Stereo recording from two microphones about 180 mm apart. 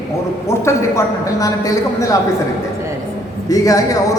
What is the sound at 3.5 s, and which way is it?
Speech, 20° left (ahead or behind).